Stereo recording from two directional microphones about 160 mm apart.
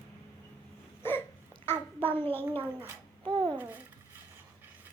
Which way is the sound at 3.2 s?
30° right (ahead or behind).